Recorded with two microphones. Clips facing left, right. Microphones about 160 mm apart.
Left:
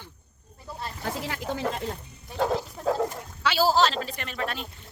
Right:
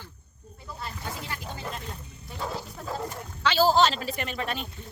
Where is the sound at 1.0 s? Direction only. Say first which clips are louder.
Left 5 dB; 85° left.